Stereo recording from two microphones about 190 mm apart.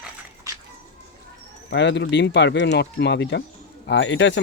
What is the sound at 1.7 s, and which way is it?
Speech, 65° left (ahead or behind).